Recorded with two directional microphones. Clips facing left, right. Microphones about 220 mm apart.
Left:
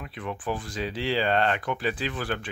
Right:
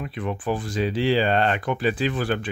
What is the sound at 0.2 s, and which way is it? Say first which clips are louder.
Speech: right 5 dB; 30° right (ahead or behind).